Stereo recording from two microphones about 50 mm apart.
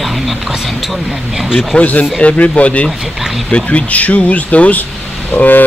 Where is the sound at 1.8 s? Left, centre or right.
Left.